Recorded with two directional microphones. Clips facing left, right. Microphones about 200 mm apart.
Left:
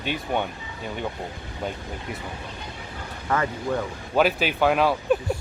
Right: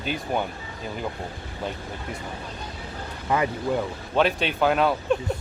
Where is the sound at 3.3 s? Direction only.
15° right (ahead or behind).